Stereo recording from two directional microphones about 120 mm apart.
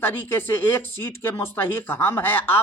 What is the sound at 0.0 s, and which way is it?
Speech, 15° left (ahead or behind).